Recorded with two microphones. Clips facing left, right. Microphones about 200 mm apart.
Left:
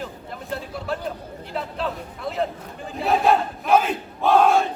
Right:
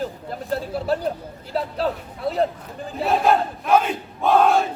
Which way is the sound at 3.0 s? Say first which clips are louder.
Even; centre (ahead or behind).